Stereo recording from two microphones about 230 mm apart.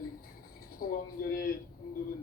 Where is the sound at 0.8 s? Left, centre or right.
Left.